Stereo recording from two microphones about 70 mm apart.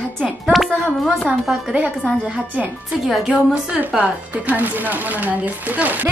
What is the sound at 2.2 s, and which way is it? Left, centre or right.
Speech, centre.